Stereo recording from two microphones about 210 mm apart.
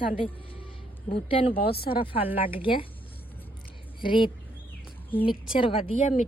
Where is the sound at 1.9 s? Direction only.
25° left (ahead or behind).